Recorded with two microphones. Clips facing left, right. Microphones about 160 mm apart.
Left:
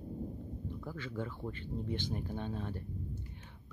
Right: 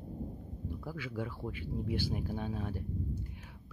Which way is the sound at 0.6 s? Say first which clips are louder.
Right 3 dB; 10° right (ahead or behind).